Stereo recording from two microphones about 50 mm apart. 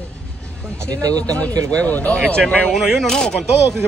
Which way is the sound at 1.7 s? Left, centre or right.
Left.